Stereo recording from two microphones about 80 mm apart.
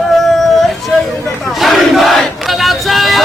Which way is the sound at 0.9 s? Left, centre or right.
Centre.